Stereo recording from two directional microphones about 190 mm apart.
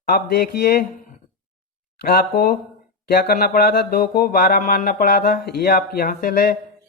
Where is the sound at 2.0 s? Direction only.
50° left (ahead or behind).